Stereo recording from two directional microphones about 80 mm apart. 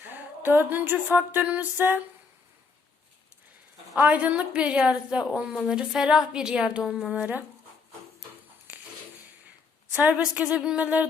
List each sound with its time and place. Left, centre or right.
0.0 s a sound: right
3.9 s a woman's voice: centre
9.9 s a woman's voice: centre